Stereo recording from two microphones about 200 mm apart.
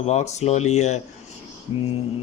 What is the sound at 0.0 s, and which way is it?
Speech, 35° left (ahead or behind).